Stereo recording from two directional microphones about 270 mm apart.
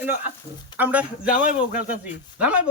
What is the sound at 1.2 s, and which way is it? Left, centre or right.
Speech, left.